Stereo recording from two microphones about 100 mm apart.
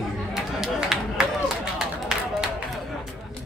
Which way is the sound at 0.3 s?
5° right (ahead or behind).